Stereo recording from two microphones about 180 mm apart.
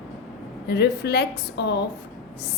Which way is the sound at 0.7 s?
65° left (ahead or behind).